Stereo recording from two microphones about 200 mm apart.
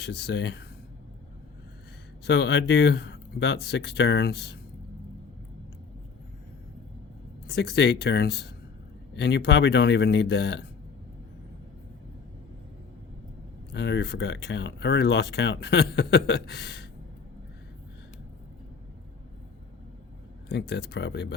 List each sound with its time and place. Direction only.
0.0 s speech: 55° left (ahead or behind)
2.2 s speech: 55° left (ahead or behind)
7.4 s speech: 55° left (ahead or behind)
13.7 s speech: 60° left (ahead or behind)
20.5 s speech: 55° left (ahead or behind)